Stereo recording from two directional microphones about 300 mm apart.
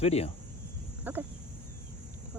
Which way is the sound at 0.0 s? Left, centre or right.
Left.